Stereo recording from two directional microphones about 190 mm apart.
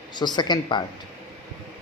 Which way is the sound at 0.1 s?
20° left (ahead or behind).